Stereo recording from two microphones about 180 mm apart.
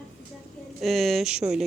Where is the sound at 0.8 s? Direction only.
Centre (ahead or behind).